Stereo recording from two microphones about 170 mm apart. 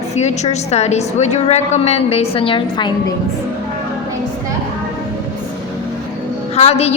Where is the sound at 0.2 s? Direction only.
40° left (ahead or behind).